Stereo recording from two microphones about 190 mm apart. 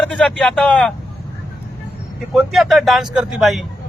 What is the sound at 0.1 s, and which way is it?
Speech, 5° left (ahead or behind).